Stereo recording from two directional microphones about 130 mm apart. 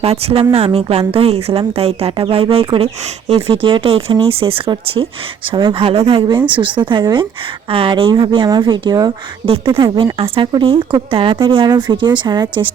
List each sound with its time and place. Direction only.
0.0 s speech: 50° right (ahead or behind)